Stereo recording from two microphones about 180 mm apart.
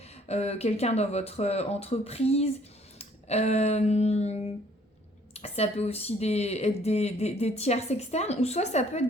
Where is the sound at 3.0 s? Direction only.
35° left (ahead or behind).